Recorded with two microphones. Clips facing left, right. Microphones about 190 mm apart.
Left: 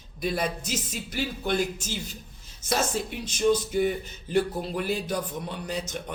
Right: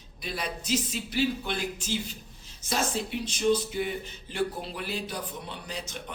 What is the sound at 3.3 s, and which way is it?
Speech, 45° left (ahead or behind).